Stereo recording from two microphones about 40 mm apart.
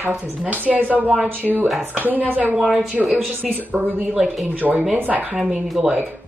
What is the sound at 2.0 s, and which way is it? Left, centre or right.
Speech, right.